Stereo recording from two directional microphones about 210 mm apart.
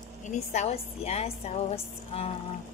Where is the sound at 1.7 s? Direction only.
30° left (ahead or behind).